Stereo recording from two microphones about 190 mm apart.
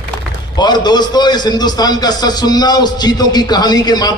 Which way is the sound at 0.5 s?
20° left (ahead or behind).